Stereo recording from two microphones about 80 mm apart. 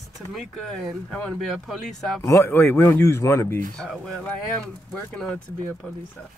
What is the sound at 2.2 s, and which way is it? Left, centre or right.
Speech, left.